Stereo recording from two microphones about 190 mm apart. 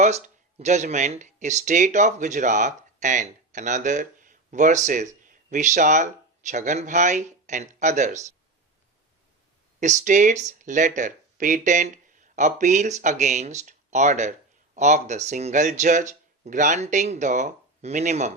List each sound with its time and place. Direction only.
0.6 s speech: 40° right (ahead or behind)
9.8 s speech: 40° right (ahead or behind)